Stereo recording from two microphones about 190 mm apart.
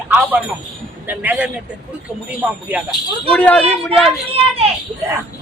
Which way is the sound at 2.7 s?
10° right (ahead or behind).